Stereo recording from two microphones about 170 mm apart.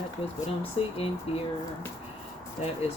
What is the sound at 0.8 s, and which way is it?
Speech, 35° left (ahead or behind).